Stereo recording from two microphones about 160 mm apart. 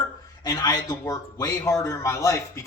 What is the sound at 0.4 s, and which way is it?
A man's voice, 25° left (ahead or behind).